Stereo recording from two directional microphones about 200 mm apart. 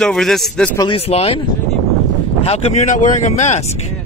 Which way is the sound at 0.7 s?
25° left (ahead or behind).